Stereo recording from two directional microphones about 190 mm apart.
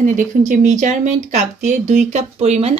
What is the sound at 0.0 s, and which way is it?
Speech, 45° right (ahead or behind).